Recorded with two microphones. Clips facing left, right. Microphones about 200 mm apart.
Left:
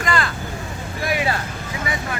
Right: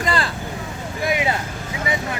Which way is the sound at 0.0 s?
30° right (ahead or behind).